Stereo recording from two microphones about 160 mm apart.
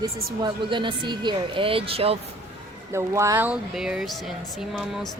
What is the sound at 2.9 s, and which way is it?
Speech, 20° right (ahead or behind).